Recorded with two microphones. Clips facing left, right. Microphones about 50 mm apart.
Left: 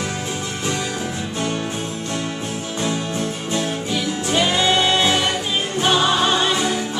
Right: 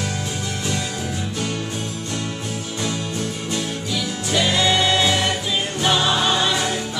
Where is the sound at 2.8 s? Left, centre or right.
Left.